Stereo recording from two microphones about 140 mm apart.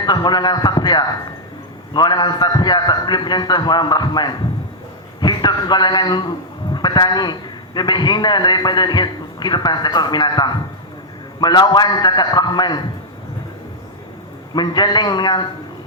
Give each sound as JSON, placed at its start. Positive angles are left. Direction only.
{"t": 0.0, "sound": "a man's voice", "side_deg": 30}
{"t": 14.5, "sound": "a man's voice", "side_deg": 30}